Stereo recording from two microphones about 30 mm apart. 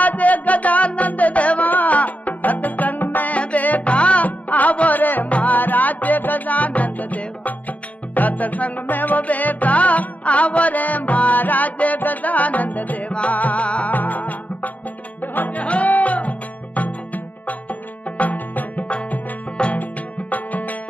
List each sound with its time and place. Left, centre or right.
0.0 s music: left
1.7 s music: left
3.3 s music: left
3.8 s music: left
4.3 s music: left
5.3 s music: left
5.6 s music: left
8.8 s music: left
9.2 s music: left
13.9 s music: left
15.5 s music: left
18.5 s music: left
19.7 s music: left